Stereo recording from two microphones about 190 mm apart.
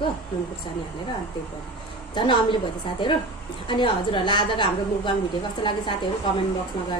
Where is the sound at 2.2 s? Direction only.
25° left (ahead or behind).